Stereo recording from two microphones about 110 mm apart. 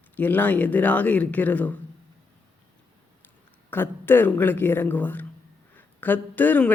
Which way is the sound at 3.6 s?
20° left (ahead or behind).